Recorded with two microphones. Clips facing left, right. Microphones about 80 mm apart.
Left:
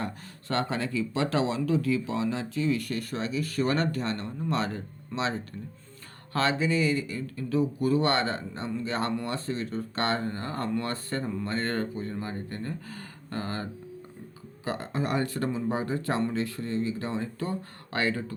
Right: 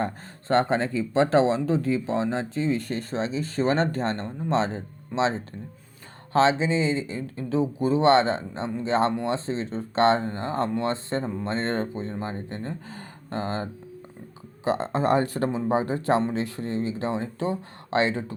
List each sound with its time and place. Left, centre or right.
0.0 s speech: right